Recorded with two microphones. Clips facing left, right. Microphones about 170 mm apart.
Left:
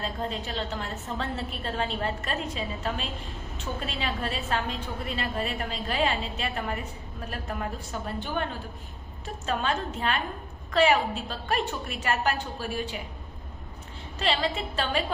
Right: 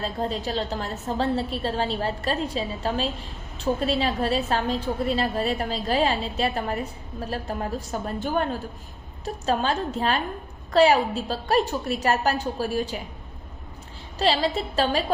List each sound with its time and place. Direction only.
0.0 s a woman's voice: 35° right (ahead or behind)
14.2 s a woman's voice: 35° right (ahead or behind)